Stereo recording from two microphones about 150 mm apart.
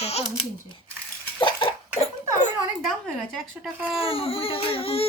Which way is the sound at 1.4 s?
30° left (ahead or behind).